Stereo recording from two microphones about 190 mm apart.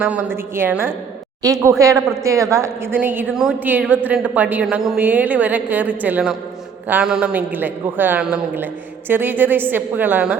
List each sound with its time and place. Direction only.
0.5 s a woman's voice: 10° right (ahead or behind)